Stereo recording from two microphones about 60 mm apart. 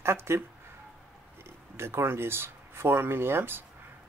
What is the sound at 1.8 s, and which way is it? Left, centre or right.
Speech, right.